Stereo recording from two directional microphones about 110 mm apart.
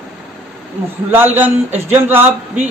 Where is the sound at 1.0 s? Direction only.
20° right (ahead or behind).